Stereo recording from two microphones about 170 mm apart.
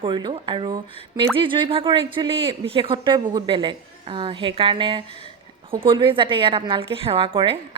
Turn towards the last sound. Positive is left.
turn(degrees=-30)  # may be behind; listen again after turning